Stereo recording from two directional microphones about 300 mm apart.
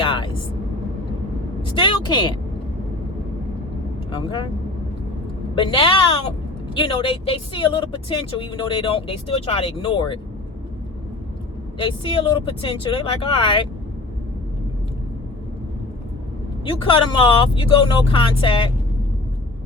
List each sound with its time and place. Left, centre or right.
0.0 s vehicle: centre
1.6 s a sound: centre
4.1 s speech: centre
5.5 s speech: centre
11.8 s speech: centre
16.6 s speech: centre